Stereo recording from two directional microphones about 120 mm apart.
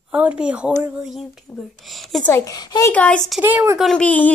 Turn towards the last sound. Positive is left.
turn(degrees=10)  # may be behind; listen again after turning